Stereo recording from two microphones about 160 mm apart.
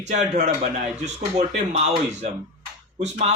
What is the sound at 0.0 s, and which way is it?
Speech, 45° right (ahead or behind).